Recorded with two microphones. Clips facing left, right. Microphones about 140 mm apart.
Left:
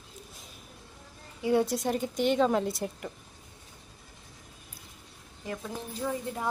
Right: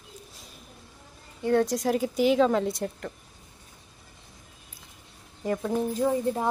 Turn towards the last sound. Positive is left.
turn(degrees=-30)  # may be behind; listen again after turning